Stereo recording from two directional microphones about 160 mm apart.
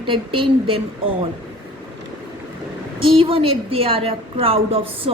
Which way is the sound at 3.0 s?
35° right (ahead or behind).